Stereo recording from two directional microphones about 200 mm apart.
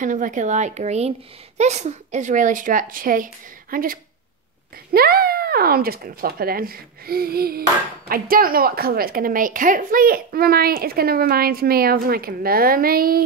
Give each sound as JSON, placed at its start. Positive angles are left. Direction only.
{"t": 0.0, "sound": "a woman's voice", "side_deg": -40}